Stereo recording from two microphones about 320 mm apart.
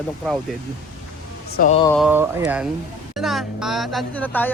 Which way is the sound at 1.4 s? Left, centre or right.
Left.